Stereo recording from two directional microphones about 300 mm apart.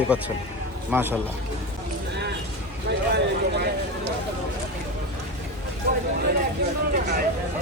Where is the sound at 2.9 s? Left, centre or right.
Right.